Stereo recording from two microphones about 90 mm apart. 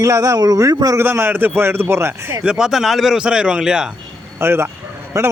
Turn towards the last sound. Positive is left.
turn(degrees=-35)  # may be behind; listen again after turning